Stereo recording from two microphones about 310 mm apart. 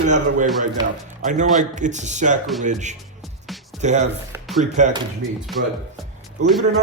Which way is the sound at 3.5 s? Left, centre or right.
Centre.